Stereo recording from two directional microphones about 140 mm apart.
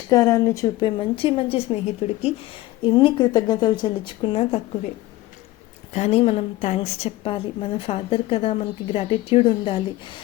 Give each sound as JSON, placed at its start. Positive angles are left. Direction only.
{"t": 0.1, "sound": "a woman's voice", "side_deg": 25}
{"t": 2.8, "sound": "a woman's voice", "side_deg": 35}
{"t": 5.9, "sound": "a woman's voice", "side_deg": 50}